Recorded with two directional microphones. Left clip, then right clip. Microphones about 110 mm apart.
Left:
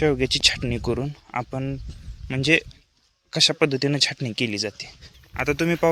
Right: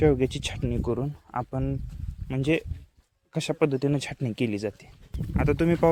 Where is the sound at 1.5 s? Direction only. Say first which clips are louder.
Left 2 dB; centre (ahead or behind).